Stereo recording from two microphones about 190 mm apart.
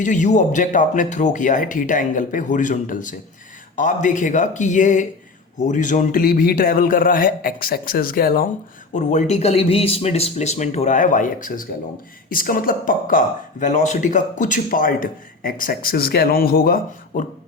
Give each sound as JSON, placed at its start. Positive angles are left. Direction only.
{"t": 0.0, "sound": "speech", "side_deg": 40}
{"t": 8.9, "sound": "speech", "side_deg": 40}